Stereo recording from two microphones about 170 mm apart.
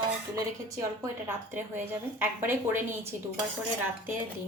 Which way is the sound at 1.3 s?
15° right (ahead or behind).